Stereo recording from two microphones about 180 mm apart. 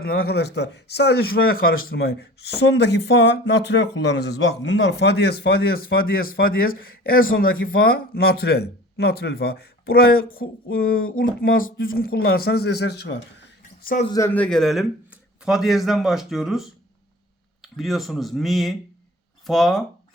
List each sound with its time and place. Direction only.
0.0 s speech: 60° left (ahead or behind)
14.1 s a man's voice: 15° left (ahead or behind)